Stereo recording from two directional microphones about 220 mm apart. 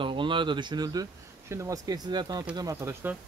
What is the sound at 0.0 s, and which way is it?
Speech, 20° right (ahead or behind).